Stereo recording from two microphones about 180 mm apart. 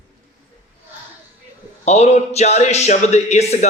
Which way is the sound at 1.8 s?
35° left (ahead or behind).